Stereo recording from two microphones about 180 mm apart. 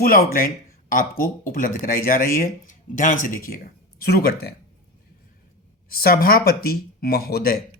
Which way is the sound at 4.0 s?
60° left (ahead or behind).